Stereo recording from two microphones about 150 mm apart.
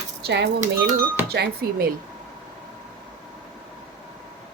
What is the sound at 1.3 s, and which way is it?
Speech, 90° right.